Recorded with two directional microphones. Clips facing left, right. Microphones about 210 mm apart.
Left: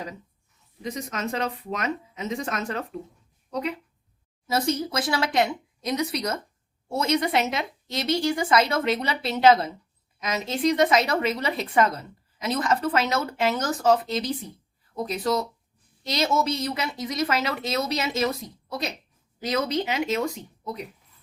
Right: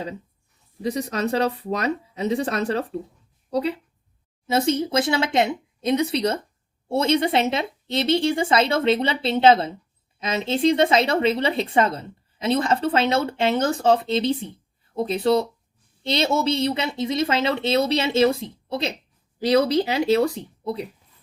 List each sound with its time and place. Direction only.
0.8 s speech: 35° right (ahead or behind)